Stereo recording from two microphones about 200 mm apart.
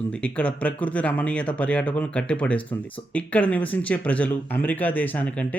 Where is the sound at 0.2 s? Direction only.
5° left (ahead or behind).